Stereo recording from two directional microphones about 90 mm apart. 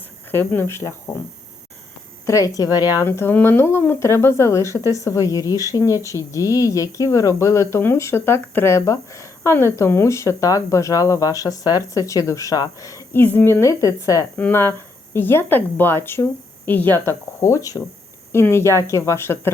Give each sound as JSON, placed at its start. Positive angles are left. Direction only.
{"t": 0.3, "sound": "a woman's voice", "side_deg": 25}
{"t": 2.2, "sound": "speech", "side_deg": 40}
{"t": 3.0, "sound": "speech", "side_deg": 25}
{"t": 13.1, "sound": "speech", "side_deg": 25}
{"t": 14.3, "sound": "a woman's voice", "side_deg": 20}
{"t": 17.4, "sound": "speech", "side_deg": 40}
{"t": 18.3, "sound": "speech", "side_deg": 30}